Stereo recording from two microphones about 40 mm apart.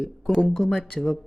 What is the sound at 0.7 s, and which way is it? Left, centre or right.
Speech, left.